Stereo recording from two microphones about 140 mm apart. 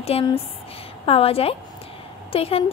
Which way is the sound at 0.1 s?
45° left (ahead or behind).